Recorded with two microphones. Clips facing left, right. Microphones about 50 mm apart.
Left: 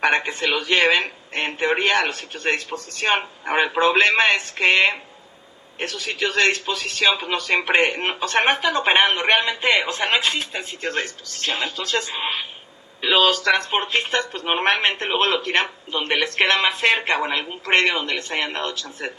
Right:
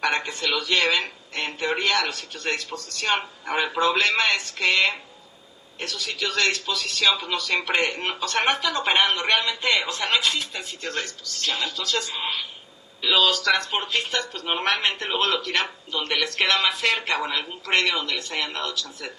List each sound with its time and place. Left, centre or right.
0.0 s a man's voice: left